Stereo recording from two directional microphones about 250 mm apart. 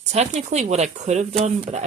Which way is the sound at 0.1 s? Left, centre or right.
Right.